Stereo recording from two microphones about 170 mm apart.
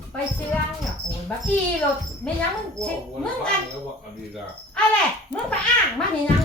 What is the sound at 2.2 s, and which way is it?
Speech, 5° left (ahead or behind).